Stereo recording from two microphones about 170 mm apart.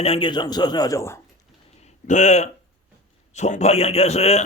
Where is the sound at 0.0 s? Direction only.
30° left (ahead or behind); by 1.2 s 15° left (ahead or behind).